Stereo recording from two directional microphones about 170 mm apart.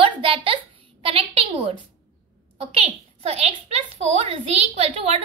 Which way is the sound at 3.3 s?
40° right (ahead or behind).